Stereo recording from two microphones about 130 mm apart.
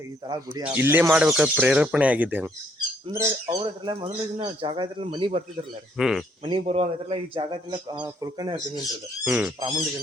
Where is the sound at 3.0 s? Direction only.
40° right (ahead or behind).